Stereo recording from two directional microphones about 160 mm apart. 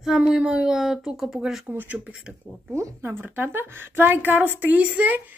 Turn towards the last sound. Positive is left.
turn(degrees=-10)  # may be behind; listen again after turning